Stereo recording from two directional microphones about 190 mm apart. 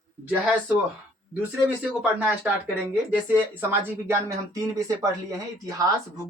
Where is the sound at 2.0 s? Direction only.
10° right (ahead or behind).